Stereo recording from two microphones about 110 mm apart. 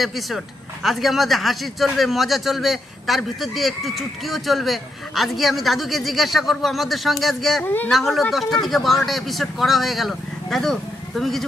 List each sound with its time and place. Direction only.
0.0 s speech: centre (ahead or behind)
7.6 s speech: 15° left (ahead or behind)
7.9 s speech: centre (ahead or behind)